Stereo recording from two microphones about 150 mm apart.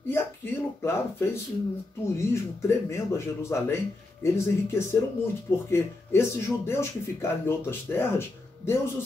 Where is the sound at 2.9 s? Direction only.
15° left (ahead or behind).